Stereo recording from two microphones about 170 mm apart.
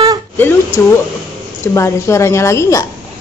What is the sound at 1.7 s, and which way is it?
A woman's voice, 15° left (ahead or behind).